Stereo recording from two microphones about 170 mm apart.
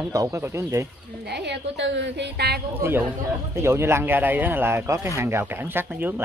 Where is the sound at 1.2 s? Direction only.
75° right (ahead or behind).